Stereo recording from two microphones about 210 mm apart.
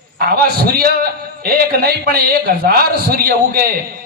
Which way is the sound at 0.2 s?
45° right (ahead or behind).